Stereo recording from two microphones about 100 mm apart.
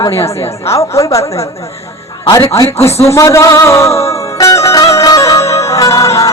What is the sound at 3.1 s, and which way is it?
Music, 30° left (ahead or behind).